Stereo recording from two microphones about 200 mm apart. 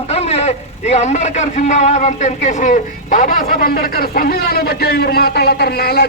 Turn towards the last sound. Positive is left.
turn(degrees=55)  # may be behind; listen again after turning